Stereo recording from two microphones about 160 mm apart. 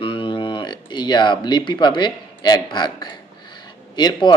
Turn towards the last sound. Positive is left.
turn(degrees=25)  # may be behind; listen again after turning